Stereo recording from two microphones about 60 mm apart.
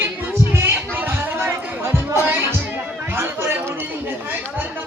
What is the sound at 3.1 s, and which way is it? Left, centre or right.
Chatter, right.